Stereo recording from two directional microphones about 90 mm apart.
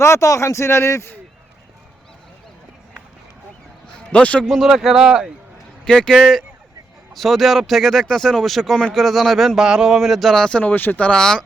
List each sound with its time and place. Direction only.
0.0 s a man's voice: 35° left (ahead or behind)
4.1 s speech: 15° left (ahead or behind); by 5.3 s 5° right (ahead or behind)
5.8 s speech: 10° left (ahead or behind)